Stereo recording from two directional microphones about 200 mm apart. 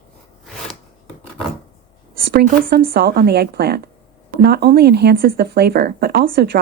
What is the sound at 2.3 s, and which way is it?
Speech, 50° right (ahead or behind).